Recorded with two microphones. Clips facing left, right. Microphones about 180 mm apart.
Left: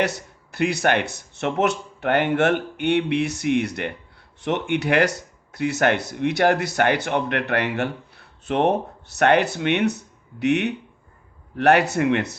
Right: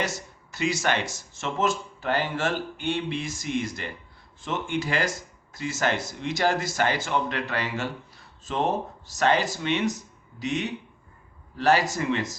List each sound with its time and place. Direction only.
0.0 s speech: 60° left (ahead or behind)